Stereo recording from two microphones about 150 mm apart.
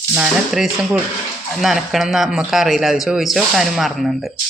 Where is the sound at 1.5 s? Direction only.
Centre (ahead or behind).